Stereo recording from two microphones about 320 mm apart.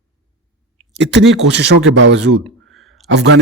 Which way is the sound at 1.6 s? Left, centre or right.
Right.